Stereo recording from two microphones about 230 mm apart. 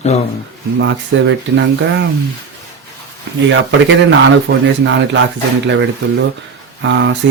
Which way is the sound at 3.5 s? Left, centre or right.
Right.